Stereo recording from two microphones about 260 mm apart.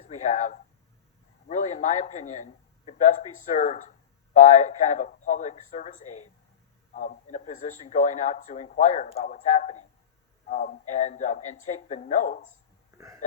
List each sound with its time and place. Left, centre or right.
0.0 s speech: left